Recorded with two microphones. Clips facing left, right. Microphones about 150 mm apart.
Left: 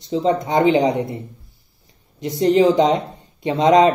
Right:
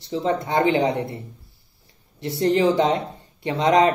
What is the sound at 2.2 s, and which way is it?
Speech, 20° left (ahead or behind).